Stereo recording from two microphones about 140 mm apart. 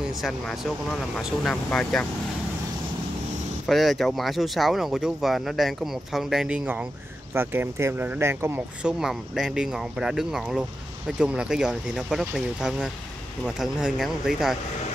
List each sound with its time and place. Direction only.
0.1 s speech: centre (ahead or behind)
3.6 s speech: centre (ahead or behind); by 8.6 s 20° right (ahead or behind)
8.8 s speech: centre (ahead or behind)